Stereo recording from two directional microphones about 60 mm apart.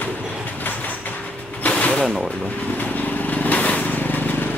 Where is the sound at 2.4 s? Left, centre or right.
Left.